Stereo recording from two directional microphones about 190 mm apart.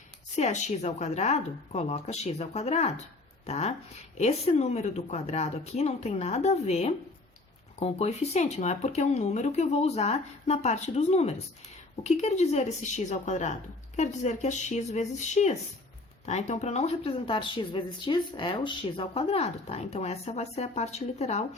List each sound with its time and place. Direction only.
0.3 s a woman's voice: 35° left (ahead or behind)